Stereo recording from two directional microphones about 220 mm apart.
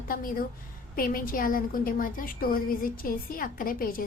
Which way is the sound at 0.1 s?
40° left (ahead or behind).